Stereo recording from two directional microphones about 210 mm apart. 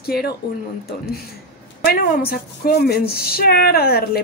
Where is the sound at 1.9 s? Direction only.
40° left (ahead or behind).